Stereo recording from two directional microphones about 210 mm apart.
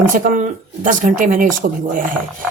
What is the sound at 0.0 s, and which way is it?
A woman's voice, 40° right (ahead or behind).